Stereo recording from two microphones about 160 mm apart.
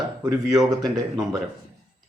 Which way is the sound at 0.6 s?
25° right (ahead or behind).